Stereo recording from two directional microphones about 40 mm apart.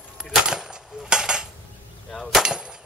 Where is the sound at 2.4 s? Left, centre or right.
Centre.